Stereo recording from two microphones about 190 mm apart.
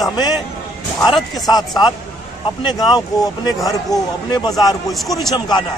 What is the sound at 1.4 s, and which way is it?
A man's voice, 20° left (ahead or behind).